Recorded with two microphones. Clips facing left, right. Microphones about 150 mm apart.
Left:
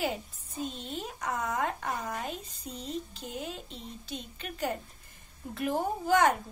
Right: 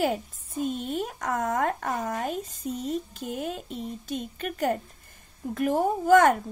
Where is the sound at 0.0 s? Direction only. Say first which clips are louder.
Right 6 dB; 50° right (ahead or behind).